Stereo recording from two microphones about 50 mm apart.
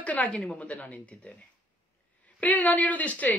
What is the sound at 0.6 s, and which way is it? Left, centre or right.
Speech, left.